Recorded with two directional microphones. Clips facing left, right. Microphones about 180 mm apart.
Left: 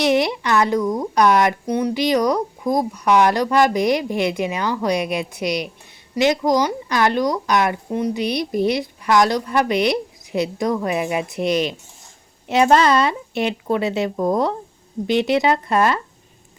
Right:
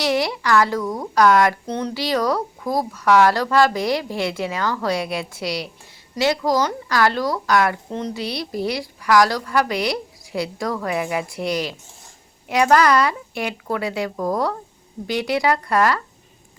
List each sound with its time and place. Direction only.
0.0 s speech: 20° left (ahead or behind)